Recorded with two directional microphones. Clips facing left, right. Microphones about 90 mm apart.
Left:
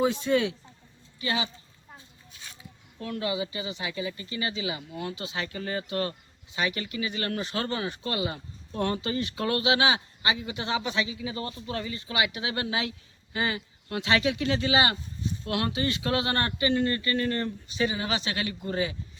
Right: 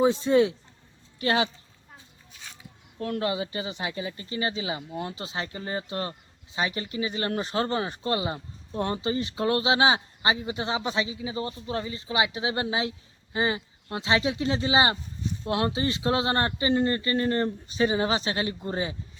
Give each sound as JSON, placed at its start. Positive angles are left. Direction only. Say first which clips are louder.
{"t": 0.0, "sound": "speech", "louder": "right 4 dB", "side_deg": -30}
{"t": 1.2, "sound": "speech", "louder": "right 5 dB", "side_deg": -55}
{"t": 3.0, "sound": "speech", "louder": "right 2 dB", "side_deg": -45}